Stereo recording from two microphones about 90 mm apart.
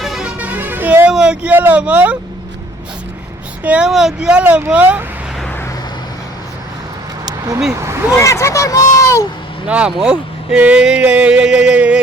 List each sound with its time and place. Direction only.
0.0 s music: centre (ahead or behind)
0.3 s music: 20° right (ahead or behind)
1.1 s speech: 10° right (ahead or behind)
3.6 s speech: 15° right (ahead or behind)
3.8 s speech: 5° right (ahead or behind)
7.3 s vehicle: 40° right (ahead or behind)
7.7 s speech: 35° right (ahead or behind)
8.2 s speech: 35° left (ahead or behind)
9.6 s speech: 15° right (ahead or behind)